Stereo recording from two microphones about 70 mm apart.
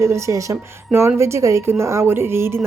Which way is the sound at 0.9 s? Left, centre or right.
Right.